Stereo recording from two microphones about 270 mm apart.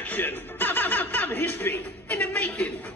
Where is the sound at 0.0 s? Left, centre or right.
Centre.